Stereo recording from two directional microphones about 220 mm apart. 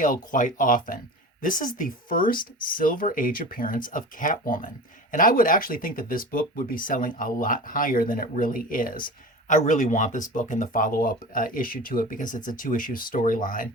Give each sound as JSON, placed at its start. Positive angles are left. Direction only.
{"t": 0.0, "sound": "speech", "side_deg": 35}